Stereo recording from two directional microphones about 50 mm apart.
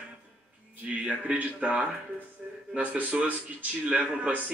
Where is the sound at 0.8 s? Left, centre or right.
Right.